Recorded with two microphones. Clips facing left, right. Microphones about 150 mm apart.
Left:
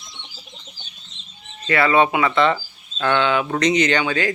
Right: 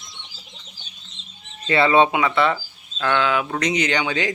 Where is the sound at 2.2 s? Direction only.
10° right (ahead or behind).